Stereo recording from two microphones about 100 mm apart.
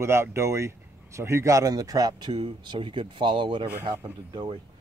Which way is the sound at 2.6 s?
55° right (ahead or behind).